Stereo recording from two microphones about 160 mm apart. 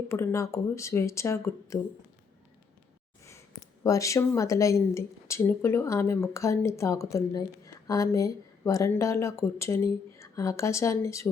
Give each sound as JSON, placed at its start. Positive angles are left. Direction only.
{"t": 0.1, "sound": "speech", "side_deg": 15}
{"t": 3.8, "sound": "speech", "side_deg": 20}